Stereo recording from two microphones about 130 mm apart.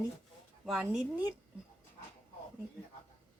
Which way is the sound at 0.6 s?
5° right (ahead or behind).